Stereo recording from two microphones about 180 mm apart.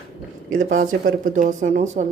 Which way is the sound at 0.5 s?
45° right (ahead or behind).